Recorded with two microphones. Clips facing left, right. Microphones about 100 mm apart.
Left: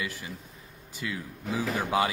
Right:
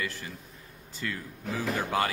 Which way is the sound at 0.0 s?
10° left (ahead or behind).